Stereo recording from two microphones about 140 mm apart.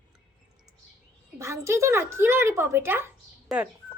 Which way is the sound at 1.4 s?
20° right (ahead or behind).